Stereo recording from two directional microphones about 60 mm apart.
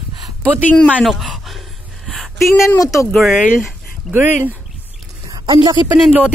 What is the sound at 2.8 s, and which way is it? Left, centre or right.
Speech, left.